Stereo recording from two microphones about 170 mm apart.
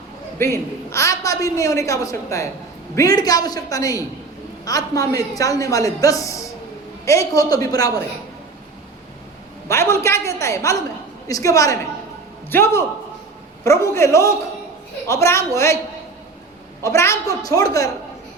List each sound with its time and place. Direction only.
0.3 s a woman's voice: 15° left (ahead or behind)
9.6 s a woman's voice: 15° left (ahead or behind)
16.8 s a woman's voice: 15° left (ahead or behind)